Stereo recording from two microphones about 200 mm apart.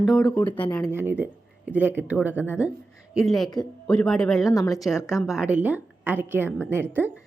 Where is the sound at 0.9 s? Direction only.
10° right (ahead or behind).